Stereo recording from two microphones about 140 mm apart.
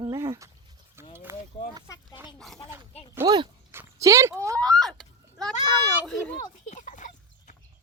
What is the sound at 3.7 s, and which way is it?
Horse, 20° right (ahead or behind).